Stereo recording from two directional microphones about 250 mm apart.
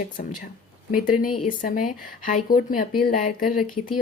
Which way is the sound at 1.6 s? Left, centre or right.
Left.